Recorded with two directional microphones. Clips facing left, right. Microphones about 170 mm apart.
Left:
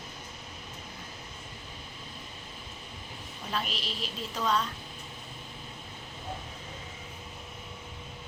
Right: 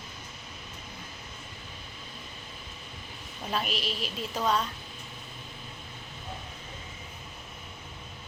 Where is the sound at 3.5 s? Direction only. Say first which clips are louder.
Right 3 dB; 10° right (ahead or behind).